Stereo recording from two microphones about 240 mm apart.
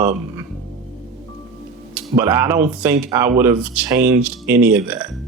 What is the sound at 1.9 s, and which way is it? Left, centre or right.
Speech, centre.